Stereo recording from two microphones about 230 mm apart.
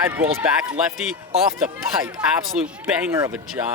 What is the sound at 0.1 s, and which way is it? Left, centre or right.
Speech, centre.